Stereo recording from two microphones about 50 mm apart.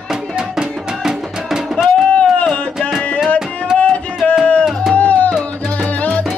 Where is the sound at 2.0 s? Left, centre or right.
Left.